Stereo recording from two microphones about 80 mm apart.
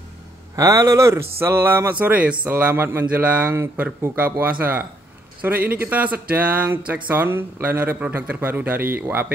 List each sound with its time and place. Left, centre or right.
0.6 s speech: right